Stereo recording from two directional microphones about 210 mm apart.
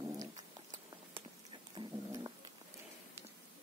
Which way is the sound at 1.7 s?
20° right (ahead or behind).